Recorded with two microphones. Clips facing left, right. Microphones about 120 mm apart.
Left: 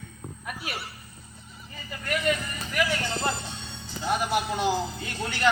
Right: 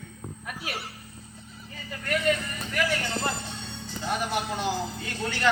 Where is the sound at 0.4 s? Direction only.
5° left (ahead or behind).